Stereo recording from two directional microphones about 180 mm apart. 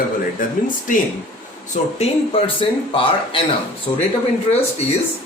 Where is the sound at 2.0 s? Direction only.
30° left (ahead or behind).